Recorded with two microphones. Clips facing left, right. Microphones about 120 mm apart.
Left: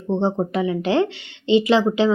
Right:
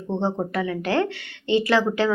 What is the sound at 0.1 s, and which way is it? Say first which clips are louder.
A woman's voice: left 4 dB; 15° left (ahead or behind).